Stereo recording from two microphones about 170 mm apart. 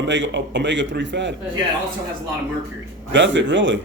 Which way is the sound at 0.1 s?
90° right.